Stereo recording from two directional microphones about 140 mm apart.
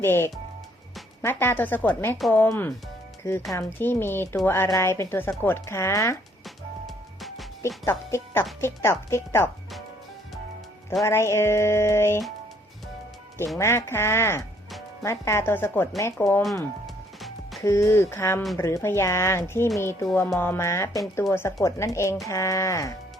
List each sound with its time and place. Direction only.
0.0 s speech: 15° left (ahead or behind)
6.8 s music: centre (ahead or behind)
7.9 s speech: 20° left (ahead or behind)
11.0 s speech: 20° left (ahead or behind)
13.6 s speech: 20° left (ahead or behind)
16.8 s music: centre (ahead or behind)
17.6 s speech: 20° left (ahead or behind)